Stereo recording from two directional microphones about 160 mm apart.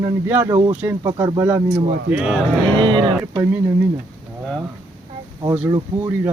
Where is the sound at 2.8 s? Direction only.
30° right (ahead or behind).